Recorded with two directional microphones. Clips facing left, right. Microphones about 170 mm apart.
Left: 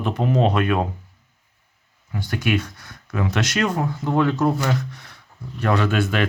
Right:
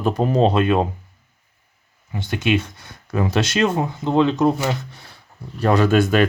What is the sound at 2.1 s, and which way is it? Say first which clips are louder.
Speech: right 2 dB; 25° right (ahead or behind).